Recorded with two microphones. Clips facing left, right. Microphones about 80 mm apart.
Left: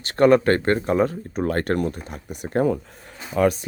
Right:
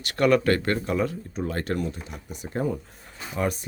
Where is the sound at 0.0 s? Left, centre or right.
Left.